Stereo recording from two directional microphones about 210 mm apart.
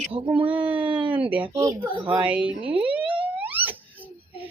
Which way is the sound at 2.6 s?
5° right (ahead or behind).